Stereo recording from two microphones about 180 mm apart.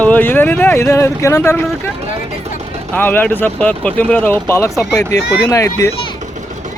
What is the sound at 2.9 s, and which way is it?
Speech, 10° left (ahead or behind).